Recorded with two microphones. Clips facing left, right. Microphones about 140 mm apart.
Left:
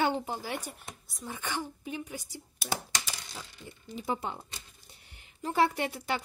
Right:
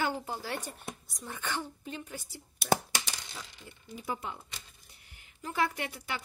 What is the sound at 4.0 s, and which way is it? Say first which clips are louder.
Speech: left 4 dB; 30° left (ahead or behind).